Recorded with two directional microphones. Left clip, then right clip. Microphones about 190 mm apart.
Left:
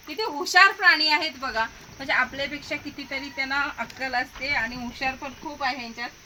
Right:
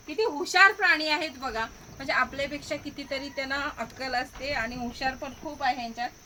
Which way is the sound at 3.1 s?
20° right (ahead or behind).